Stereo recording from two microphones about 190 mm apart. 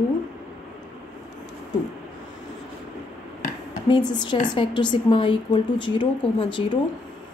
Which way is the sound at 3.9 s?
25° left (ahead or behind).